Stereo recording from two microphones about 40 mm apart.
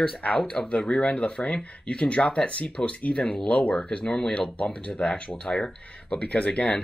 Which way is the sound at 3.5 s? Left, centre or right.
Left.